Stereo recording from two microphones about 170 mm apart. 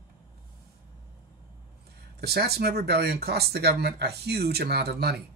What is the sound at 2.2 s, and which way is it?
Speech, 70° right (ahead or behind).